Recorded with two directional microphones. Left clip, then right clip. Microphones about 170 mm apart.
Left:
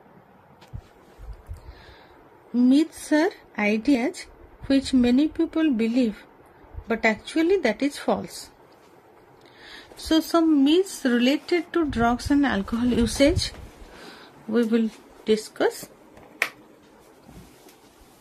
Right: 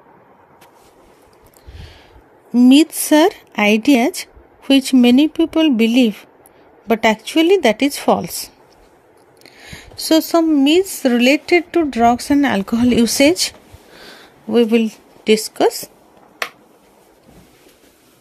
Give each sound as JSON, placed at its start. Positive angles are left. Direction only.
{"t": 2.5, "sound": "speech", "side_deg": -35}
{"t": 9.7, "sound": "speech", "side_deg": -35}
{"t": 14.5, "sound": "a woman's voice", "side_deg": -35}